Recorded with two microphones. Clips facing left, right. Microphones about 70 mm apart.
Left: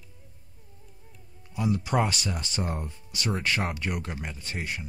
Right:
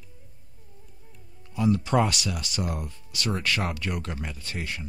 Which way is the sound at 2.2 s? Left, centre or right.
Left.